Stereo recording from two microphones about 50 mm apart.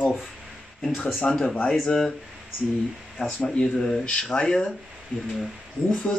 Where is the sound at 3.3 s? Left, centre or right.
Centre.